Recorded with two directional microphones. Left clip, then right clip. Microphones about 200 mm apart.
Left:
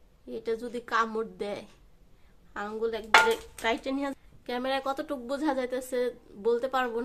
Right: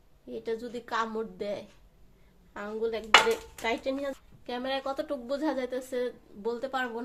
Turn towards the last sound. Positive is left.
turn(degrees=15)  # may be behind; listen again after turning